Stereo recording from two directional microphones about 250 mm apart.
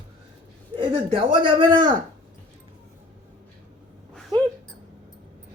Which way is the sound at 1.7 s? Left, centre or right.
Right.